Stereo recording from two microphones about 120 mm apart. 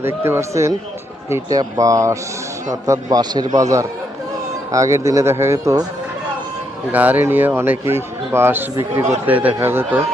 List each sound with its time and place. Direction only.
0.0 s a man's voice: 20° right (ahead or behind)
6.9 s a man's voice: 15° right (ahead or behind)